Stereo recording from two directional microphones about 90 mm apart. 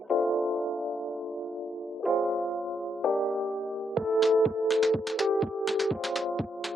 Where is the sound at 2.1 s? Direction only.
Centre (ahead or behind).